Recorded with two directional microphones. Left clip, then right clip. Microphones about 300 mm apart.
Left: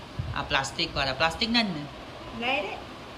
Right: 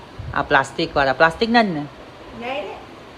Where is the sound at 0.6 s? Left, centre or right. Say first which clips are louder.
Right 9 dB; centre.